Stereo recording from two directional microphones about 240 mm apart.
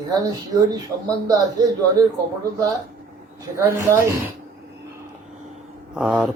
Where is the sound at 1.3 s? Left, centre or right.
Centre.